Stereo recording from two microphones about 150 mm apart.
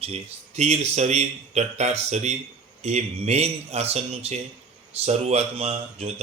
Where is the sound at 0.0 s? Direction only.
45° right (ahead or behind).